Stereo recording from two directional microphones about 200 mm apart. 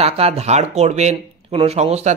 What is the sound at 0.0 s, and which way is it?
Speech, 30° right (ahead or behind).